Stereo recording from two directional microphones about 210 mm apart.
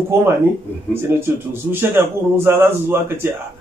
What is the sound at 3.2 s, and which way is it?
Speech, 10° right (ahead or behind).